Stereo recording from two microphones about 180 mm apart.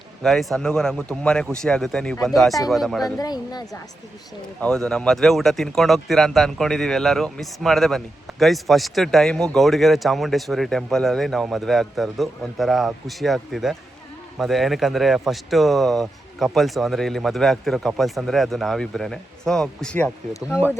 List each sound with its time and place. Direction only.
0.2 s speech: centre (ahead or behind)
3.2 s speech: 20° left (ahead or behind)
4.6 s speech: 5° left (ahead or behind)